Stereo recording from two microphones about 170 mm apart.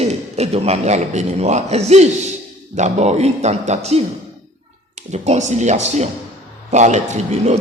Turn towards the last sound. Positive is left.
turn(degrees=-40)  # may be behind; listen again after turning